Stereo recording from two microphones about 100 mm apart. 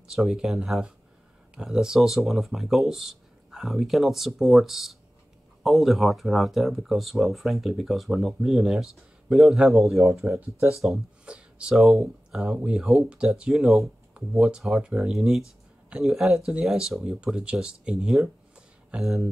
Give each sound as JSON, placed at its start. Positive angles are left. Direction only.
{"t": 0.1, "sound": "speech", "side_deg": -5}